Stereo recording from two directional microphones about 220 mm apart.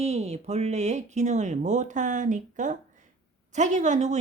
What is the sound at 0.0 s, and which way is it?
Speech, 30° right (ahead or behind).